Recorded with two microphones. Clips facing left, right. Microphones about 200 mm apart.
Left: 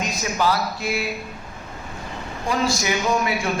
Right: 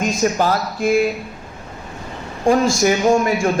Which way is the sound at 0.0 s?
45° right (ahead or behind).